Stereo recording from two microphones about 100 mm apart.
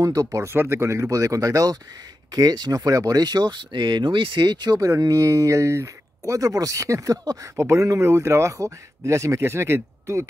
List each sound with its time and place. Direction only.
0.0 s speech: 35° right (ahead or behind)